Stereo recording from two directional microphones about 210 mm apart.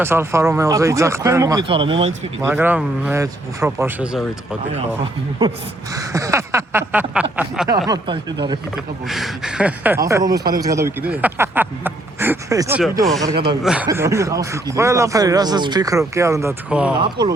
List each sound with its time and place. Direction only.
0.0 s speech: 10° right (ahead or behind)
2.4 s speech: 10° right (ahead or behind)
6.1 s speech: 15° right (ahead or behind)
7.9 s speech: 20° right (ahead or behind)
9.0 s speech: centre (ahead or behind)
13.6 s speech: 5° right (ahead or behind)
17.0 s speech: 20° right (ahead or behind)